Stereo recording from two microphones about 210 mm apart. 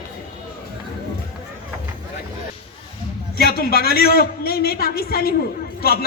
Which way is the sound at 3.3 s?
45° left (ahead or behind).